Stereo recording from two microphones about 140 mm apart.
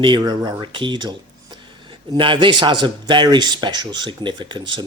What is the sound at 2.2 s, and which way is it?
Speech, 35° right (ahead or behind).